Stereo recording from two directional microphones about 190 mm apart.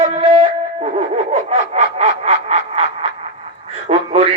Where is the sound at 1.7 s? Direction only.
35° right (ahead or behind).